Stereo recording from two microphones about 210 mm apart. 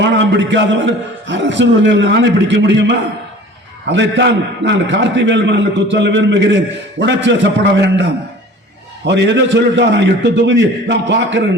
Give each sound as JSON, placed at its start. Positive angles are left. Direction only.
{"t": 0.0, "sound": "a man's voice", "side_deg": -55}